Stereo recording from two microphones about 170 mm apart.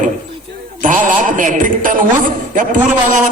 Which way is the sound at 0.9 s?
50° right (ahead or behind).